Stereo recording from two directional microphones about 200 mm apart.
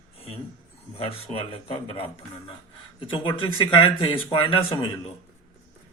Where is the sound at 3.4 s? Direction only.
25° left (ahead or behind).